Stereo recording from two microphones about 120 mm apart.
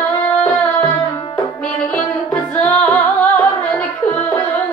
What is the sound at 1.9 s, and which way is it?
Music, 10° left (ahead or behind).